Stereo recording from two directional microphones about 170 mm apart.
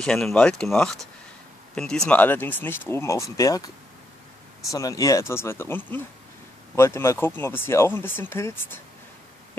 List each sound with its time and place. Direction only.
0.0 s speech: 5° left (ahead or behind); by 3.7 s 20° left (ahead or behind)
4.7 s speech: 20° left (ahead or behind)